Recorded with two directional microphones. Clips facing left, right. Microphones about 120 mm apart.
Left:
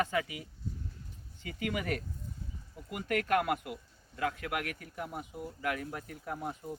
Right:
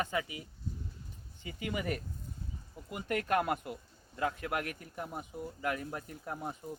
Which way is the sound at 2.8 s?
25° right (ahead or behind).